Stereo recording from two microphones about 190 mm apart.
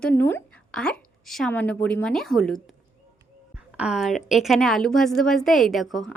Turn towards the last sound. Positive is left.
turn(degrees=0)  # may be behind; listen again after turning